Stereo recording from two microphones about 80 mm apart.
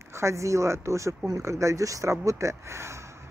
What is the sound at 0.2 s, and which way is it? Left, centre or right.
Speech, right.